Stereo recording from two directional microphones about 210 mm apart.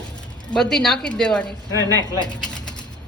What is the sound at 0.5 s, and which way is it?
Speech, centre (ahead or behind).